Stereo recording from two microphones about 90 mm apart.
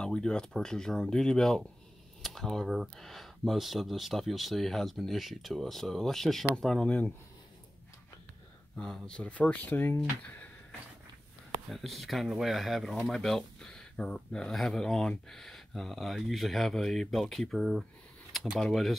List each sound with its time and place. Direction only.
0.0 s speech: 10° left (ahead or behind)
8.7 s speech: 5° left (ahead or behind)
11.7 s speech: centre (ahead or behind)